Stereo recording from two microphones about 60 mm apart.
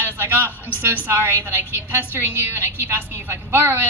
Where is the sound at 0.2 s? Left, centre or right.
Right.